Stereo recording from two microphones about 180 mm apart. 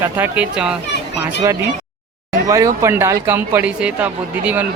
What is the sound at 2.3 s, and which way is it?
Speech, 20° right (ahead or behind).